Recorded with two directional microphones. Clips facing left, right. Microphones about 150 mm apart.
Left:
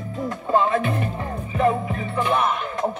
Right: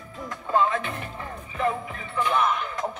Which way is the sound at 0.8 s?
45° left (ahead or behind).